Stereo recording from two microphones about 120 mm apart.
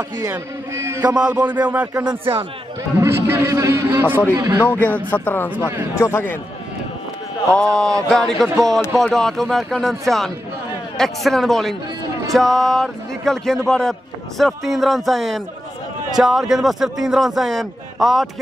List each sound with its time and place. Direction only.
0.7 s a man's voice: 20° right (ahead or behind)
2.0 s a man's voice: 50° right (ahead or behind)
3.0 s a man's voice: 20° right (ahead or behind)
4.7 s speech: 15° left (ahead or behind)
5.6 s a man's voice: 20° right (ahead or behind)
5.9 s a man's voice: 20° left (ahead or behind)
7.5 s speech: 5° left (ahead or behind)